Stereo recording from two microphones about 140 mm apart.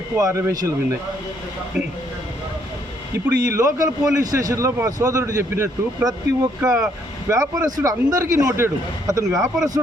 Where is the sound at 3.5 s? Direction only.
25° right (ahead or behind).